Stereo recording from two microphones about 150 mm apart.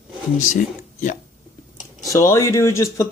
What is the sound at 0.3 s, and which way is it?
Speech, 55° left (ahead or behind).